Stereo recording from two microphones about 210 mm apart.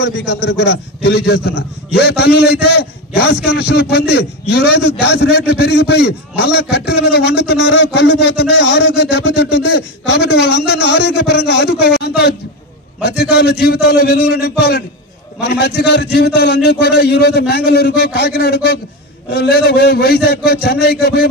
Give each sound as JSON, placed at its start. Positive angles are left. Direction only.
{"t": 0.0, "sound": "speech", "side_deg": 55}